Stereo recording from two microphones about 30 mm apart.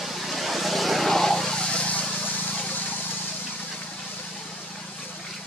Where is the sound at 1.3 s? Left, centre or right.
Left.